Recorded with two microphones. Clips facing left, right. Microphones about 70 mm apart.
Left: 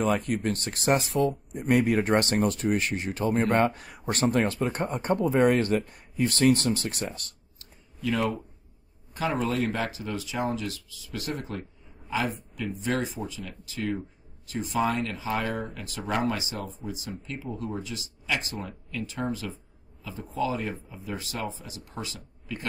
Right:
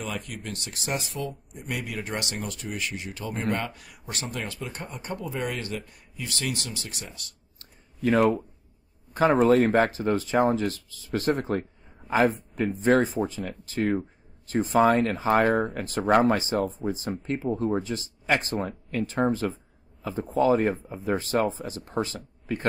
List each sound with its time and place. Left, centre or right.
0.0 s speech: left
7.5 s a sound: right
9.1 s speech: right